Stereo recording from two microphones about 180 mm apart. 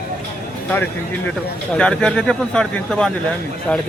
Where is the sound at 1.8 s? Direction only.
5° left (ahead or behind).